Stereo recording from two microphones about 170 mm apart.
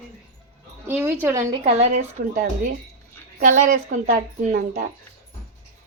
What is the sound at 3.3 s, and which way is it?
Speech, 50° right (ahead or behind).